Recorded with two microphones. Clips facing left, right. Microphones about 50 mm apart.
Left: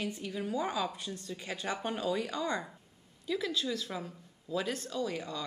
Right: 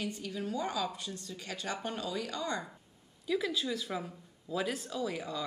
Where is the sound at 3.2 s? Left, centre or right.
Centre.